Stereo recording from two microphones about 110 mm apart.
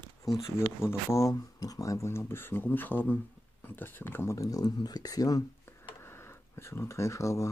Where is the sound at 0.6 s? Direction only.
25° left (ahead or behind).